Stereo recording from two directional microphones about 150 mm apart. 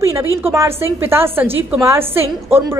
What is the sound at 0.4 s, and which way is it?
A woman's voice, 15° right (ahead or behind).